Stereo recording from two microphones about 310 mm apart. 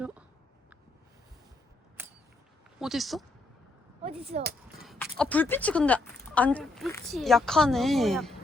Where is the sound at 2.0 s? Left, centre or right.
Centre.